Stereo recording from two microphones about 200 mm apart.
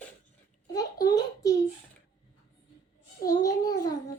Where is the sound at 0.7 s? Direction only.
20° left (ahead or behind).